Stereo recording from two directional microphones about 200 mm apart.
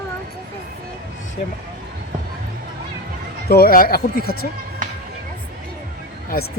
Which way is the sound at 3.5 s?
50° left (ahead or behind).